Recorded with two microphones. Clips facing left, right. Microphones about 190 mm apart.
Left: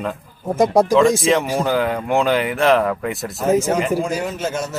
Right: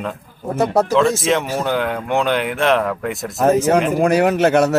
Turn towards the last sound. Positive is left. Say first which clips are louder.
# right 10 dB
turn(degrees=-70)  # may be behind; listen again after turning